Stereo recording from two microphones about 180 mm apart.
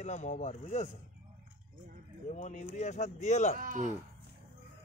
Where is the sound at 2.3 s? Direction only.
45° left (ahead or behind).